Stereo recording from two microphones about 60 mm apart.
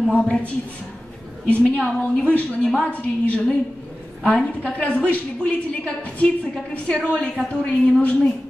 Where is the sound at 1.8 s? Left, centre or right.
Centre.